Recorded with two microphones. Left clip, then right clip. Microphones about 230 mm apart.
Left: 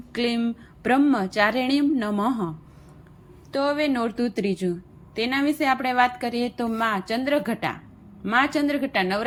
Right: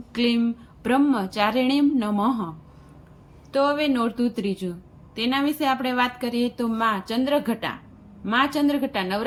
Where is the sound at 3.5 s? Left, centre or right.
Centre.